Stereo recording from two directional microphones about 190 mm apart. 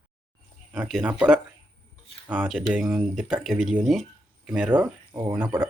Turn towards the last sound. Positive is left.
turn(degrees=-15)  # may be behind; listen again after turning